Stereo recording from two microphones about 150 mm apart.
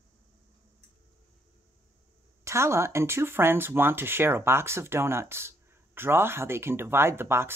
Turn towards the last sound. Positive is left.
turn(degrees=-15)  # may be behind; listen again after turning